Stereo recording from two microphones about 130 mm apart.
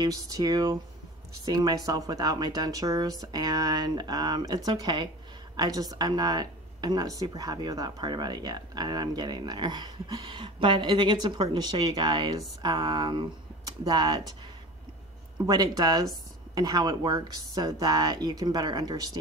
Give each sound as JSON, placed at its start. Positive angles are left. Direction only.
{"t": 0.0, "sound": "speech", "side_deg": -30}
{"t": 15.3, "sound": "speech", "side_deg": -30}